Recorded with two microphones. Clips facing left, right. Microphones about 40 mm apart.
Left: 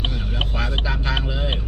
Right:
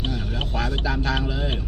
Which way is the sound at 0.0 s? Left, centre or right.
Left.